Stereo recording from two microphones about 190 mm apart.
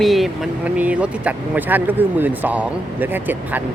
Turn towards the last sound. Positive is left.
turn(degrees=-10)  # may be behind; listen again after turning